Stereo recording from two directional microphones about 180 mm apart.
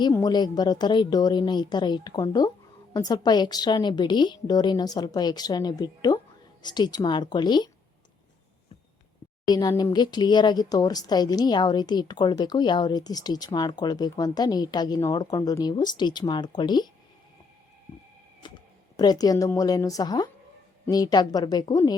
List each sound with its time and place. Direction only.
0.1 s speech: 20° left (ahead or behind)
9.5 s speech: 20° left (ahead or behind)
18.4 s a sound: 25° left (ahead or behind)
18.9 s speech: 20° left (ahead or behind)